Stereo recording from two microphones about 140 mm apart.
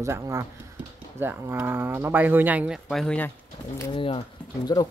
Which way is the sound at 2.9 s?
5° left (ahead or behind).